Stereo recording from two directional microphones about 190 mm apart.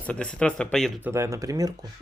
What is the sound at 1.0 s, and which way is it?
Speech, 15° right (ahead or behind).